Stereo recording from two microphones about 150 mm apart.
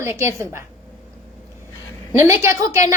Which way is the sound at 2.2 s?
20° right (ahead or behind).